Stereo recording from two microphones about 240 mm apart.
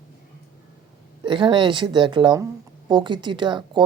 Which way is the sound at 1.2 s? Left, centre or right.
Centre.